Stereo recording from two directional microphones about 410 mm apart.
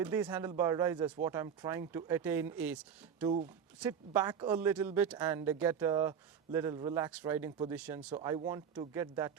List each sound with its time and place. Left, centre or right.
0.0 s a woman's voice: centre